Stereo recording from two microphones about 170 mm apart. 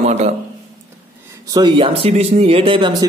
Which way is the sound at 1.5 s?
30° right (ahead or behind).